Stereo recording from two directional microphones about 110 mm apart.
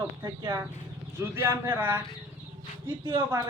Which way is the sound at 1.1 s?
20° right (ahead or behind).